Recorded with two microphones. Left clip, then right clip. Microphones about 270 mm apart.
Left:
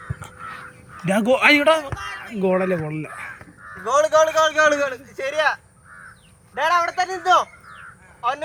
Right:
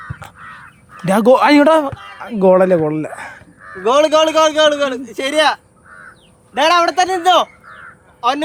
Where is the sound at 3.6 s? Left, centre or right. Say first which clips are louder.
Right 8 dB; right.